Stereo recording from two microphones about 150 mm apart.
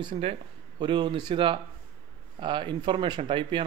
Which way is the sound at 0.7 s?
30° right (ahead or behind).